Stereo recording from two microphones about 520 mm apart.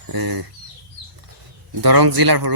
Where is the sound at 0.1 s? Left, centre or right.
Right.